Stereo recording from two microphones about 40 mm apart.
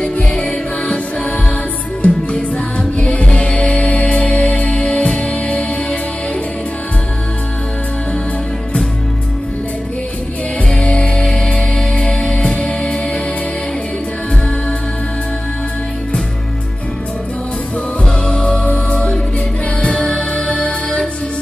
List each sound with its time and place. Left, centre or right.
0.0 s music: centre
10.7 s music: left
18.2 s music: left
19.8 s music: left